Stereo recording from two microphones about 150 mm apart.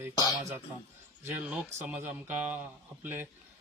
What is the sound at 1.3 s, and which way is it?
Speech, 10° right (ahead or behind).